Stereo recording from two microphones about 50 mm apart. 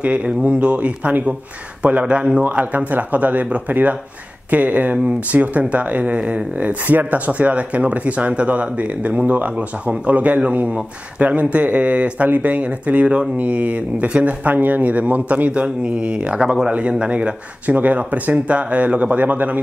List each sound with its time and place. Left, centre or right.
0.0 s speech: right